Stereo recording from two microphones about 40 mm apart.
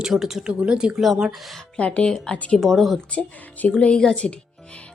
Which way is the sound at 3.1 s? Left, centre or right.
Left.